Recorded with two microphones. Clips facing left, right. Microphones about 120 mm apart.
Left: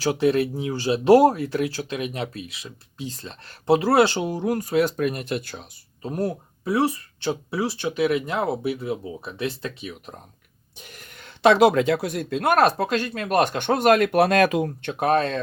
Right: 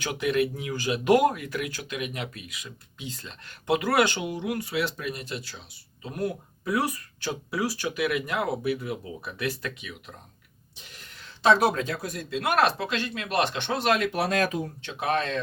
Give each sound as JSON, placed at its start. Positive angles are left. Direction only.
{"t": 0.0, "sound": "speech", "side_deg": 35}
{"t": 10.8, "sound": "speech", "side_deg": 50}